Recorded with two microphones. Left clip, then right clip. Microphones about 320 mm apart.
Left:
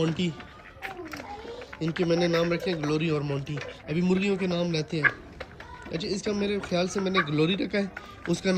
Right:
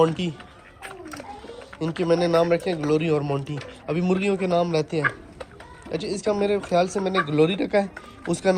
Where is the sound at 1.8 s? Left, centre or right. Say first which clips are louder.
Right 4 dB; centre.